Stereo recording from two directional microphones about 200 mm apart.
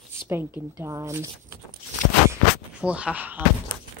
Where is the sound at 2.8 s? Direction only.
5° right (ahead or behind).